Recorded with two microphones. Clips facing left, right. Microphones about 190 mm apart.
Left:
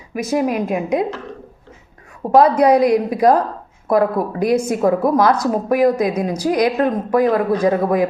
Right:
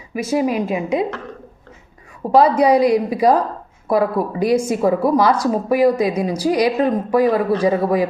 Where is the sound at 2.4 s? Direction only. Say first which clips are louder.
Left 1 dB; 55° left (ahead or behind).